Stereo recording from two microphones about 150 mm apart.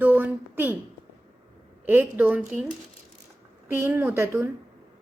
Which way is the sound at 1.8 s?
15° right (ahead or behind).